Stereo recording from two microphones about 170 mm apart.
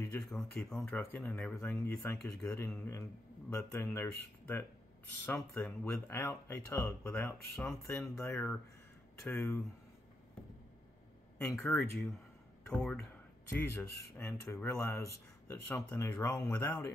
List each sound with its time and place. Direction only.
0.1 s speech: centre (ahead or behind)
7.5 s speech: 5° left (ahead or behind)
8.2 s speech: 15° left (ahead or behind)
11.6 s speech: centre (ahead or behind)